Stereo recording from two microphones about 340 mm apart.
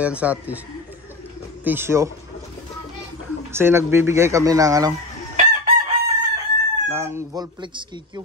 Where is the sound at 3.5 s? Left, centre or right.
Centre.